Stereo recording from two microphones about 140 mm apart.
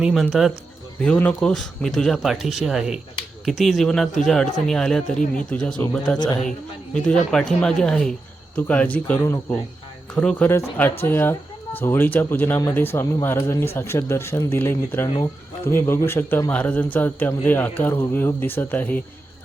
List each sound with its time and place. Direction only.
0.0 s a man's voice: centre (ahead or behind)
6.9 s a man's voice: 5° left (ahead or behind)